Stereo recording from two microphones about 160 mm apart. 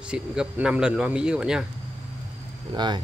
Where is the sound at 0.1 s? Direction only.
5° right (ahead or behind).